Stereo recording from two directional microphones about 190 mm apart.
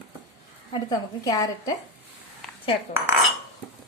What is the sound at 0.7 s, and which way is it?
A woman's voice, 20° left (ahead or behind).